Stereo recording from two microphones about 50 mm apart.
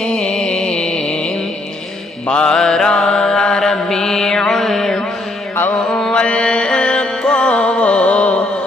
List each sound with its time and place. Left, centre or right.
0.0 s music: centre
2.2 s mantra: centre
6.2 s music: left